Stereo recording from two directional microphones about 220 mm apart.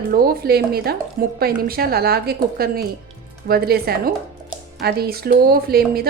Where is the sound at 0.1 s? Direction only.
40° right (ahead or behind).